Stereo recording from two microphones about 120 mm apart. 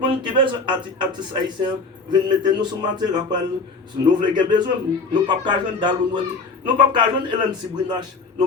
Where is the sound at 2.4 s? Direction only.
40° right (ahead or behind).